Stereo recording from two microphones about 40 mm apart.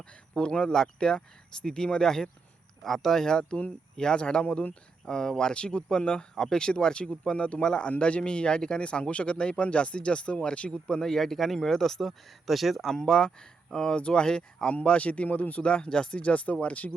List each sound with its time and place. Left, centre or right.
0.0 s speech: left
10.8 s speech: centre
12.9 s speech: centre
14.7 s speech: left
15.6 s speech: left
16.2 s speech: left